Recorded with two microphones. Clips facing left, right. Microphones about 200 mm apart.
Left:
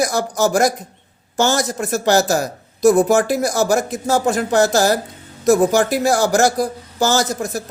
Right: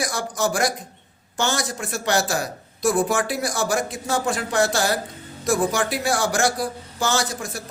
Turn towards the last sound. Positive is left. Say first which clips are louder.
# left 6 dB
turn(degrees=40)  # may be behind; listen again after turning